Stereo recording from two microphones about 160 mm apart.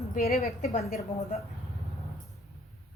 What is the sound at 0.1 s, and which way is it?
Speech, 70° left (ahead or behind).